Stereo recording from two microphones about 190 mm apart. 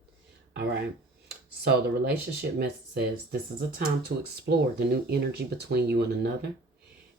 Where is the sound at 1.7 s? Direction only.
60° right (ahead or behind).